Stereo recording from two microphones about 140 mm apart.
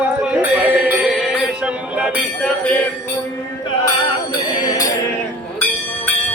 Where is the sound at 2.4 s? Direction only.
10° left (ahead or behind).